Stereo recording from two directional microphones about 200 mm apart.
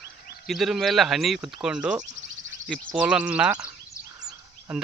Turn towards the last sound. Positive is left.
turn(degrees=-5)  # may be behind; listen again after turning